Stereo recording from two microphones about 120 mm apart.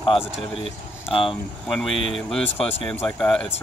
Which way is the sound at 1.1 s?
50° left (ahead or behind).